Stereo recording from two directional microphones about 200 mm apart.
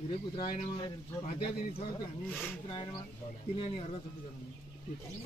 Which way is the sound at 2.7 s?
25° left (ahead or behind).